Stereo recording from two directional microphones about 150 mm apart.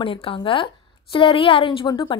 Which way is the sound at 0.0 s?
35° left (ahead or behind).